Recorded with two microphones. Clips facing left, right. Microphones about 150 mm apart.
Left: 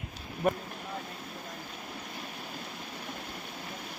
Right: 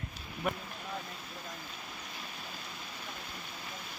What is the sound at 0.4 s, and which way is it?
Speech, 45° left (ahead or behind).